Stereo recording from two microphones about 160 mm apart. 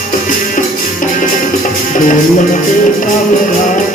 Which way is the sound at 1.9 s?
55° left (ahead or behind).